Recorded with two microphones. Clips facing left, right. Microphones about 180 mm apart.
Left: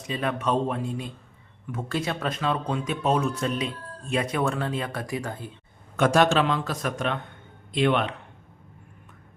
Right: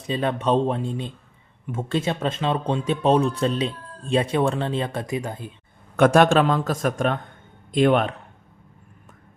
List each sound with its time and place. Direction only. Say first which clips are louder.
0.1 s speech: right 4 dB; 30° right (ahead or behind)
6.0 s a man's voice: right 5 dB; 55° right (ahead or behind)